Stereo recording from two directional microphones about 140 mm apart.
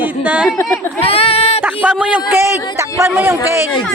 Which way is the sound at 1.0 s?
45° left (ahead or behind).